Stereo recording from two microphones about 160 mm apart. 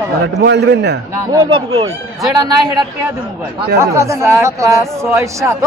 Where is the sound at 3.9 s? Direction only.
15° right (ahead or behind).